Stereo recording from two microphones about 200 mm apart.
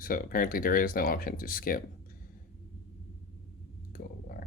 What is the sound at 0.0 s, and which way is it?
Speech, 45° left (ahead or behind).